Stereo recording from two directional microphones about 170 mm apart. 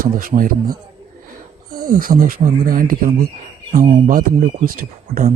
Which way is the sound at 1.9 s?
55° right (ahead or behind).